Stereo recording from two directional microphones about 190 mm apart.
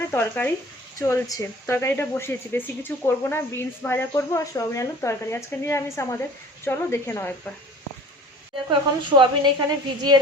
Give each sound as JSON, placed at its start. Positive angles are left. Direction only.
{"t": 0.1, "sound": "speech", "side_deg": 10}
{"t": 9.0, "sound": "a woman's voice", "side_deg": -25}